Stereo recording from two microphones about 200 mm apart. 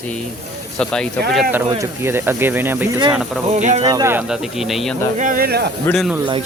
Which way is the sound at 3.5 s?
35° right (ahead or behind).